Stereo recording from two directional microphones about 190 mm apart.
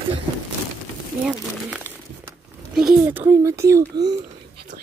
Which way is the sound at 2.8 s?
5° right (ahead or behind).